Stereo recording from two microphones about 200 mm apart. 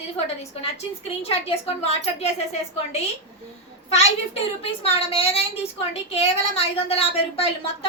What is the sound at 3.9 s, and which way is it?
A woman's voice, 30° left (ahead or behind).